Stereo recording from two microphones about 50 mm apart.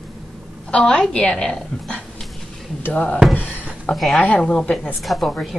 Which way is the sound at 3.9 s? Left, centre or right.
Centre.